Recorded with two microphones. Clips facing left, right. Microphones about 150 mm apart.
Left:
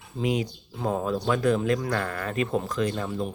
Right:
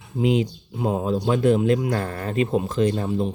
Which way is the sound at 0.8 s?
15° right (ahead or behind).